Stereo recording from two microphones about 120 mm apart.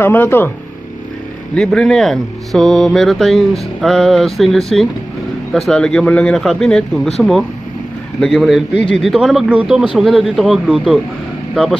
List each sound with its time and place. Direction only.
0.0 s speech: 20° left (ahead or behind)
1.5 s speech: 5° left (ahead or behind)